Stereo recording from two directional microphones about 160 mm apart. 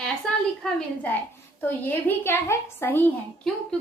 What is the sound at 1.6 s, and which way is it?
A woman's voice, 10° left (ahead or behind).